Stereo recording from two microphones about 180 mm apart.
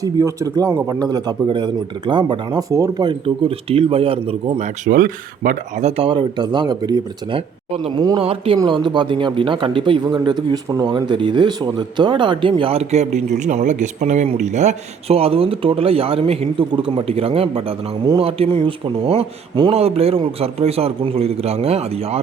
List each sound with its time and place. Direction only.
0.0 s speech: 15° right (ahead or behind); by 4.7 s 35° right (ahead or behind)
4.9 s speech: 55° right (ahead or behind)
5.8 s a man's voice: 30° right (ahead or behind)